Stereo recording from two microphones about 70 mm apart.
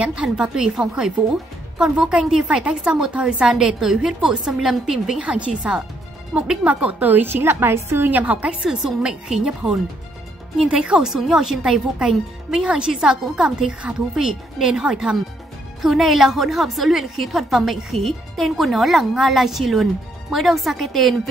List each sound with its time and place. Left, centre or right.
0.0 s a woman's voice: centre
5.2 s a woman's voice: centre; by 8.1 s right
8.1 s a woman's voice: right
8.6 s a woman's voice: centre
10.6 s a woman's voice: centre